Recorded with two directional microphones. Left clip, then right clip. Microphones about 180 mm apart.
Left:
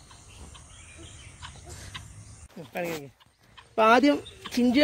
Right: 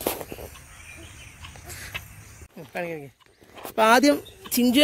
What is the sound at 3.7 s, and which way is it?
Speech, 10° right (ahead or behind).